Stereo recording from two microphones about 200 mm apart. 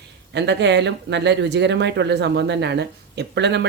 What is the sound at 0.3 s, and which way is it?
Speech, 60° right (ahead or behind).